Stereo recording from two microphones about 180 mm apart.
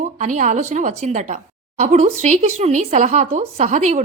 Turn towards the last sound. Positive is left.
turn(degrees=-45)  # may be behind; listen again after turning